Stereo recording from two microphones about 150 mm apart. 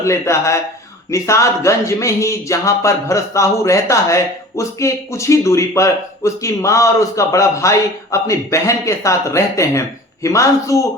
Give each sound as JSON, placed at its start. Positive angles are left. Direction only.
{"t": 0.0, "sound": "speech", "side_deg": 20}